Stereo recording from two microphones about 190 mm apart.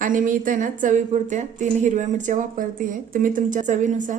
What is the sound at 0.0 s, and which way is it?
A woman's voice, 45° right (ahead or behind).